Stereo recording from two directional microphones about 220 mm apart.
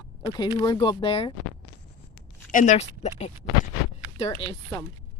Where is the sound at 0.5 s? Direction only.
20° left (ahead or behind).